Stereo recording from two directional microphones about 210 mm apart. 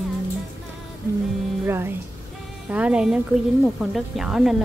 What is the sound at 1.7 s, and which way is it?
Music, 10° right (ahead or behind).